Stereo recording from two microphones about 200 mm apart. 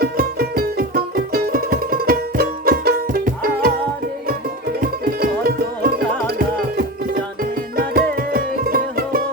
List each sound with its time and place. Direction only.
0.0 s music: 50° right (ahead or behind)
4.8 s music: 50° right (ahead or behind)